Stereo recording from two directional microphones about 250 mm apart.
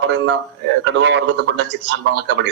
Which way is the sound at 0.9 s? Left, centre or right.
Right.